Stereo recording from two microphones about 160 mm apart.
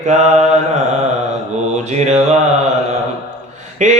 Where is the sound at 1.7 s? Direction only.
45° right (ahead or behind).